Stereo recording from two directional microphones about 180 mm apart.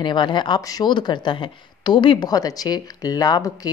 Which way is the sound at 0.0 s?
25° left (ahead or behind).